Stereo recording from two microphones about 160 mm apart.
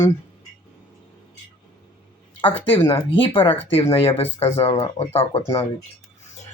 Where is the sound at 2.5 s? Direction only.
10° left (ahead or behind).